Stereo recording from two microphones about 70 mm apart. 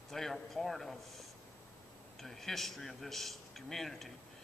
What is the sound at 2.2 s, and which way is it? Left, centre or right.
A man's voice, centre.